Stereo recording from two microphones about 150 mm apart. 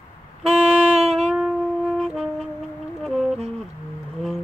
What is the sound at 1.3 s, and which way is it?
Brass instrument, 5° right (ahead or behind).